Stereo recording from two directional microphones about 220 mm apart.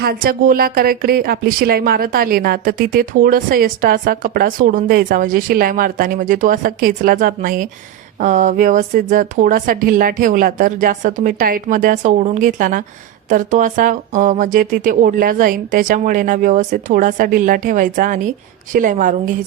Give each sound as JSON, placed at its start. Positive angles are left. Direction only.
{"t": 0.0, "sound": "speech", "side_deg": -40}